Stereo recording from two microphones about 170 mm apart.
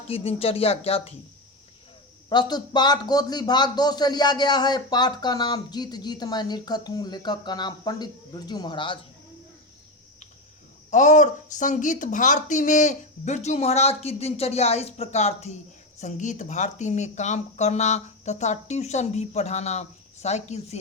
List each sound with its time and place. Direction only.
0.1 s speech: 35° left (ahead or behind)
2.3 s a man's voice: 25° left (ahead or behind)
10.9 s speech: 45° left (ahead or behind)